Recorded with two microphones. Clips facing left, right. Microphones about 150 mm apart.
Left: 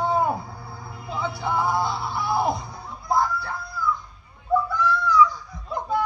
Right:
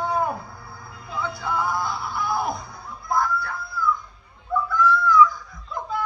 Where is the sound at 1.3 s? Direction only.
25° left (ahead or behind).